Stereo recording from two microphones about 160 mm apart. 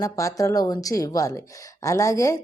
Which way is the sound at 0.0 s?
20° left (ahead or behind).